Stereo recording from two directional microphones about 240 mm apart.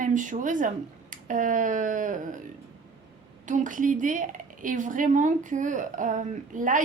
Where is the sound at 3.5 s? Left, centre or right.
Right.